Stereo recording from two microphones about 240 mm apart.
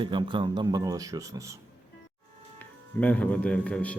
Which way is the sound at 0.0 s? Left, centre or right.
Centre.